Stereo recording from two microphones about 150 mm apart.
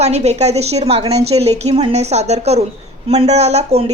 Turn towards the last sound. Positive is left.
turn(degrees=-45)  # may be behind; listen again after turning